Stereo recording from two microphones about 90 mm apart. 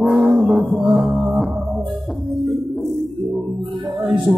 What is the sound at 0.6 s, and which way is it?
Music, centre (ahead or behind).